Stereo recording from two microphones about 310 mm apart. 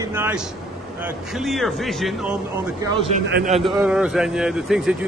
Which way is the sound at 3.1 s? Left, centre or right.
Right.